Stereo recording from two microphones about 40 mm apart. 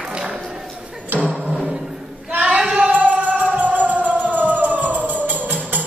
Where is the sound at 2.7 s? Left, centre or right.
Right.